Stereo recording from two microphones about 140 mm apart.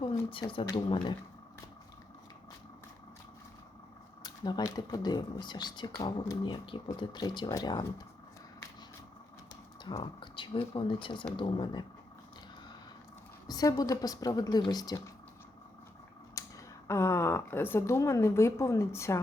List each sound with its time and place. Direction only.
0.0 s speech: 40° left (ahead or behind)
4.2 s speech: 30° left (ahead or behind)
9.8 s speech: 35° left (ahead or behind)
13.5 s a woman's voice: 25° left (ahead or behind)
16.4 s a sound: 25° left (ahead or behind)
16.8 s a woman's voice: 20° left (ahead or behind)